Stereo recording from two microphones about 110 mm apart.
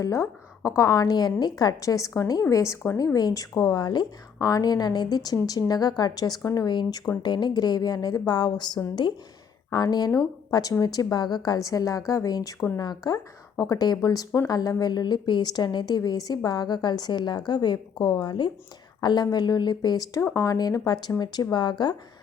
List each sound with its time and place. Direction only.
0.0 s a woman's voice: 25° left (ahead or behind)